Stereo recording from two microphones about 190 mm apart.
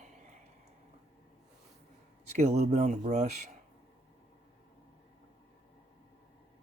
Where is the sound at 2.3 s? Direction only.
35° right (ahead or behind).